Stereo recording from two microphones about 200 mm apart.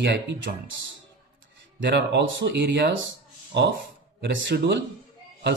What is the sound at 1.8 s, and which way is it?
Speech, 60° right (ahead or behind).